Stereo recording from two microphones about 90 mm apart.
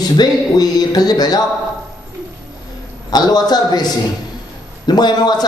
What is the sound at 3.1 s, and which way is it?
Speech, 50° left (ahead or behind).